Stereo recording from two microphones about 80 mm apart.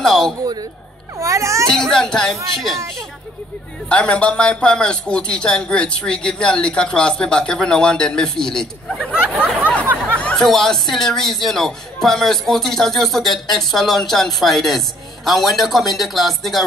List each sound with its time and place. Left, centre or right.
0.0 s a sound: centre
1.1 s baby cry: right
1.7 s a man's voice: centre
3.9 s a man's voice: centre
8.9 s speech: centre
9.3 s a man's voice: centre
9.6 s a sound: centre
10.3 s a man's voice: centre